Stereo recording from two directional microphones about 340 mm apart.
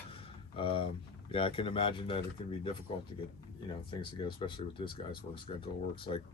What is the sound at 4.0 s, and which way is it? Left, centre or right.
Speech, centre.